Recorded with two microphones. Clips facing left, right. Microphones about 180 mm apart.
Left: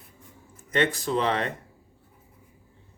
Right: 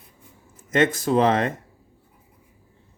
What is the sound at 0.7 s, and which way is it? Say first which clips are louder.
Speech: right 5 dB; 45° right (ahead or behind).